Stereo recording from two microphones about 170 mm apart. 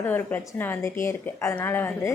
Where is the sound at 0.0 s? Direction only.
10° left (ahead or behind).